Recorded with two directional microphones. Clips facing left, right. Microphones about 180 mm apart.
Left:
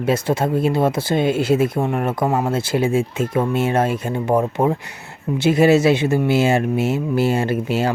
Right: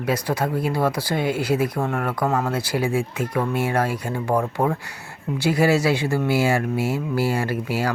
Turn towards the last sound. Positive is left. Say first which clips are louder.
# left 4 dB
turn(degrees=25)  # may be behind; listen again after turning